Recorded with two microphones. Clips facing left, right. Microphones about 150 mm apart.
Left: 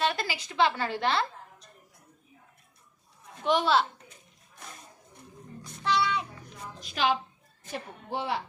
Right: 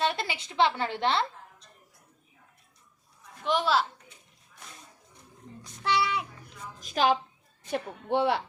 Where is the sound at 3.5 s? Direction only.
Centre (ahead or behind).